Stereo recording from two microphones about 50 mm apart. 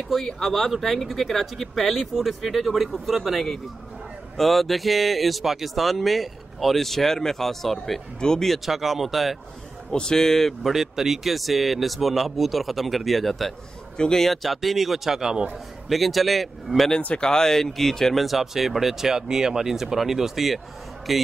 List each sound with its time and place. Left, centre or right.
0.1 s speech: centre
8.5 s speech: centre
9.8 s speech: centre
10.7 s speech: centre
13.9 s speech: centre
14.2 s speech: centre